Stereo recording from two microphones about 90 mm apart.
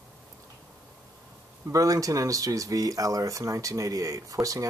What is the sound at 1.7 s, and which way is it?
Speech, 40° right (ahead or behind).